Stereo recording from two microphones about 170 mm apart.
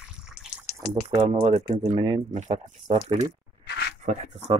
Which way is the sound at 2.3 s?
40° right (ahead or behind).